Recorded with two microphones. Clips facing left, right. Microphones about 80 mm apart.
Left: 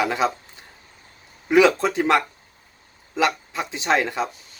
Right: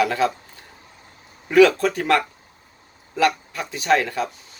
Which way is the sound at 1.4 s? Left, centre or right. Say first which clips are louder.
Right 2 dB; centre.